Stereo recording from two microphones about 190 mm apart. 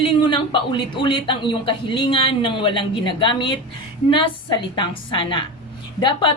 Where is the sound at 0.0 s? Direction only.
25° left (ahead or behind).